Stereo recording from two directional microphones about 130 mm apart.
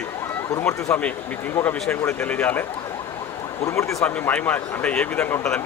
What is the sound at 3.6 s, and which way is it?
Speech, 25° left (ahead or behind).